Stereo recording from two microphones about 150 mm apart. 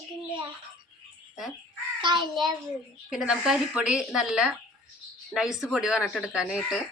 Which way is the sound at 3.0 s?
5° right (ahead or behind).